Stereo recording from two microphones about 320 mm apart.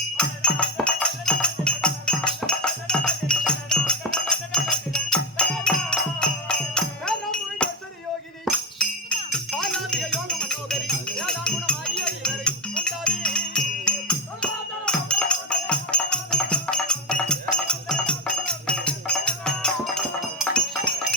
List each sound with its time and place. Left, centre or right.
0.2 s music: centre